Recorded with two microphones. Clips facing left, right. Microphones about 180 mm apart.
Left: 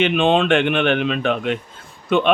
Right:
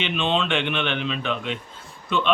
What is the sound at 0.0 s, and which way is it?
Speech, 55° left (ahead or behind).